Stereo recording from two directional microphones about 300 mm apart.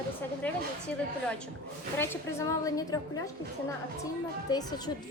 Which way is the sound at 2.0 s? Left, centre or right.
Centre.